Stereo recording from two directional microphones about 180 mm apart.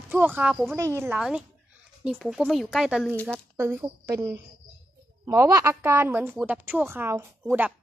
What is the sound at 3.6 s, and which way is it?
A woman's voice, 10° right (ahead or behind).